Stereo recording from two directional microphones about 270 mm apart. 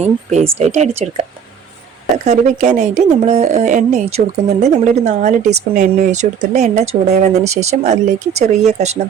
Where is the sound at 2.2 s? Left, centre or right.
Right.